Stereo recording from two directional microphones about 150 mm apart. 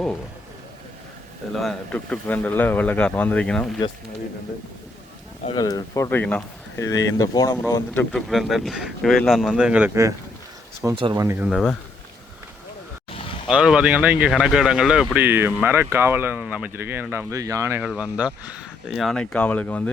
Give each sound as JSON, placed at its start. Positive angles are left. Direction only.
{"t": 1.5, "sound": "speech", "side_deg": 5}
{"t": 5.5, "sound": "speech", "side_deg": 25}
{"t": 8.1, "sound": "speech", "side_deg": 0}
{"t": 9.9, "sound": "speech", "side_deg": -20}
{"t": 10.9, "sound": "speech", "side_deg": -35}
{"t": 11.2, "sound": "speech", "side_deg": -15}
{"t": 11.4, "sound": "speech", "side_deg": 0}
{"t": 13.5, "sound": "speech", "side_deg": -5}